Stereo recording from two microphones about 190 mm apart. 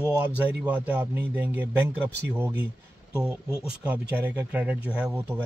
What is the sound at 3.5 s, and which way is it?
Speech, 5° right (ahead or behind).